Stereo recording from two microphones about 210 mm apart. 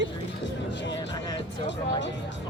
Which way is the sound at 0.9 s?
20° left (ahead or behind).